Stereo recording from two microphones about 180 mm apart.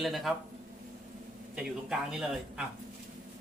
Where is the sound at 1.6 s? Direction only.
5° right (ahead or behind).